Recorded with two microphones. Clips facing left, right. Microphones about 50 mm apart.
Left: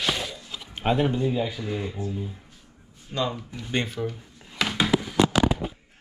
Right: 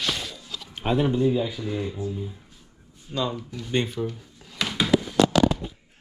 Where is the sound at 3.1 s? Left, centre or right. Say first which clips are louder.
Even; left.